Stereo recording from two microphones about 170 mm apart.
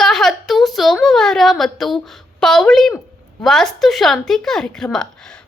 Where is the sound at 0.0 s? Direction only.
Centre (ahead or behind).